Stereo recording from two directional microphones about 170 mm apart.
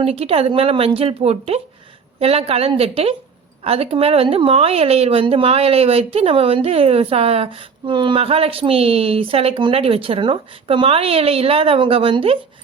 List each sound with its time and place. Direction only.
0.0 s speech: 35° right (ahead or behind)